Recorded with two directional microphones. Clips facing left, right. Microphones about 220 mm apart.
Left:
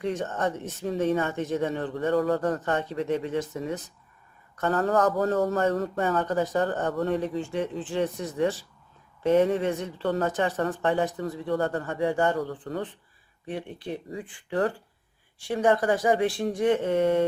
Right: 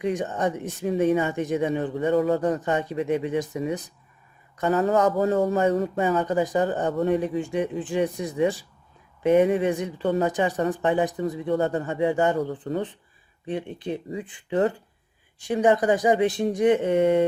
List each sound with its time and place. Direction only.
0.0 s speech: 15° right (ahead or behind)